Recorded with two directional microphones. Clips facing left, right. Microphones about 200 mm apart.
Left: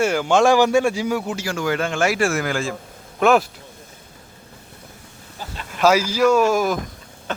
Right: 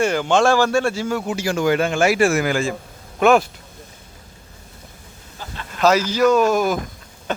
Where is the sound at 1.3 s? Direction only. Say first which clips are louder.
Right 4 dB; 15° right (ahead or behind); by 3.5 s centre (ahead or behind).